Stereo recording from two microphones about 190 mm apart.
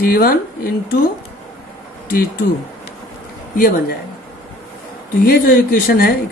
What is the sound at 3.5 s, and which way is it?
Speech, 50° left (ahead or behind).